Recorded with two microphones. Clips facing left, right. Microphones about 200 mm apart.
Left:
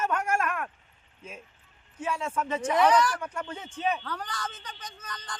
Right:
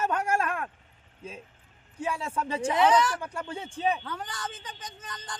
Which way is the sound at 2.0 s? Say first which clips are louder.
Even; 30° right (ahead or behind).